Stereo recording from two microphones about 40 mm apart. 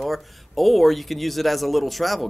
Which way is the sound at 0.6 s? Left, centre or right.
Centre.